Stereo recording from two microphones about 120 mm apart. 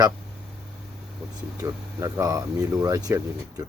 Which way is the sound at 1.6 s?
25° right (ahead or behind).